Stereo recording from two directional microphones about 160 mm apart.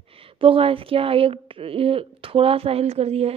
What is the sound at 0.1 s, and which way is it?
Speech, 35° right (ahead or behind).